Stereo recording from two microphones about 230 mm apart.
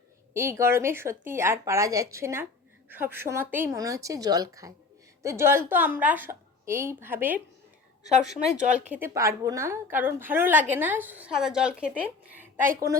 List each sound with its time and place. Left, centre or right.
0.3 s speech: centre
8.7 s speech: centre